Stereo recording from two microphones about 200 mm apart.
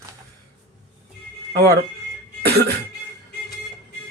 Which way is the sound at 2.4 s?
55° right (ahead or behind).